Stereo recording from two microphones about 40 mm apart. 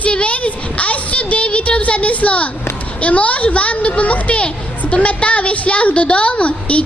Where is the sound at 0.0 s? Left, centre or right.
Left.